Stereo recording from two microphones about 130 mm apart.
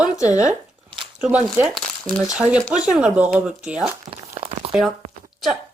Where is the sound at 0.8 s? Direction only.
40° right (ahead or behind).